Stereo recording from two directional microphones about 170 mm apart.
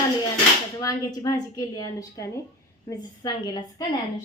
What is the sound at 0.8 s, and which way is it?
A woman's voice, 20° left (ahead or behind).